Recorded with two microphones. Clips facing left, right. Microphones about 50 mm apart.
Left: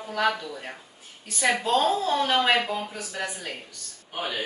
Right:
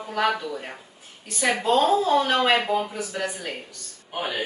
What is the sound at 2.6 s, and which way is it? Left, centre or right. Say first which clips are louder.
Speech: right 4 dB; centre.